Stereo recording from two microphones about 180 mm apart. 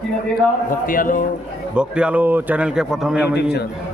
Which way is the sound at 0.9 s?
50° left (ahead or behind).